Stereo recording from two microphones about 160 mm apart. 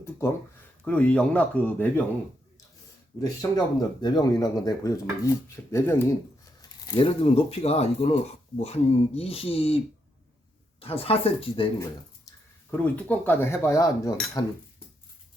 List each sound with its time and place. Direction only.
0.9 s speech: 10° left (ahead or behind)
3.2 s speech: 25° left (ahead or behind)
6.6 s speech: 25° left (ahead or behind)
12.7 s speech: 10° left (ahead or behind)